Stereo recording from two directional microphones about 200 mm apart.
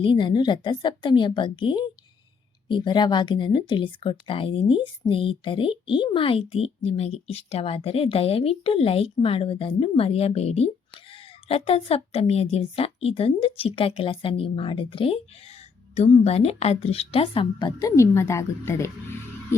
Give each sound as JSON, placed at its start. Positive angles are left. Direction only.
{"t": 0.0, "sound": "speech", "side_deg": 25}